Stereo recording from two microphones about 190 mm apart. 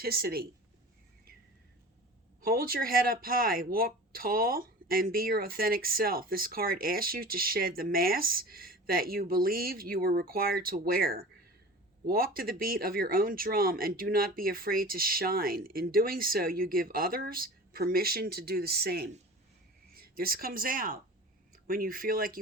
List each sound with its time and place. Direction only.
0.0 s speech: 55° right (ahead or behind)
2.4 s speech: 50° right (ahead or behind)